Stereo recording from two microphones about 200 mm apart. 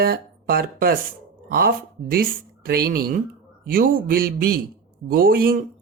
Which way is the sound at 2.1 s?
50° right (ahead or behind).